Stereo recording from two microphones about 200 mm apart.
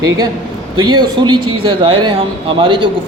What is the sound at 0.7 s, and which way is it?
Speech, 20° right (ahead or behind).